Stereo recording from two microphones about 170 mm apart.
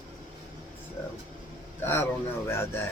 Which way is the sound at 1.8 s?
15° left (ahead or behind).